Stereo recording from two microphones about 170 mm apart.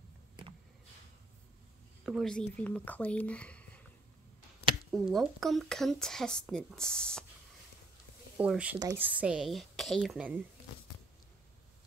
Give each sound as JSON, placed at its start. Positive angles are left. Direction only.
{"t": 2.0, "sound": "speech", "side_deg": 0}
{"t": 4.9, "sound": "speech", "side_deg": 0}
{"t": 8.4, "sound": "speech", "side_deg": -5}
{"t": 9.2, "sound": "speech", "side_deg": -5}